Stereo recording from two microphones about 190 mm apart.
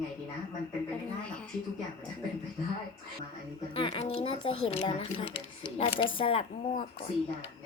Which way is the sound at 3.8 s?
30° left (ahead or behind).